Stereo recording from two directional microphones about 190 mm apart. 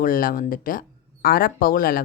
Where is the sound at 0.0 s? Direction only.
50° left (ahead or behind).